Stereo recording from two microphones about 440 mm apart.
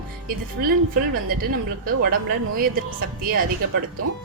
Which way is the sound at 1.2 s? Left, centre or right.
Centre.